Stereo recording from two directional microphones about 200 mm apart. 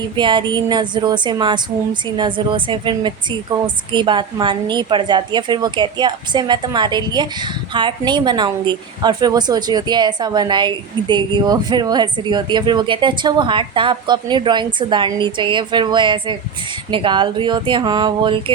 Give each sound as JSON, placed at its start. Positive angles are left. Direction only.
{"t": 0.2, "sound": "a woman's voice", "side_deg": -25}